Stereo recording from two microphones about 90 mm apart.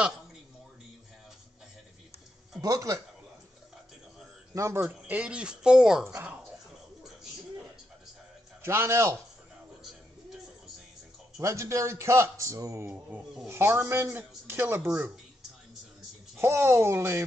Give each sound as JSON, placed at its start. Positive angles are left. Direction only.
{"t": 2.6, "sound": "speech", "side_deg": -40}
{"t": 4.6, "sound": "speech", "side_deg": -30}
{"t": 6.0, "sound": "speech", "side_deg": -25}
{"t": 8.6, "sound": "speech", "side_deg": -30}
{"t": 11.3, "sound": "speech", "side_deg": -35}
{"t": 16.3, "sound": "speech", "side_deg": -30}